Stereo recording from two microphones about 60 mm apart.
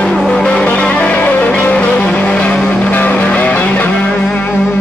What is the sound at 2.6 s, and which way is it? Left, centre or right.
Music, left.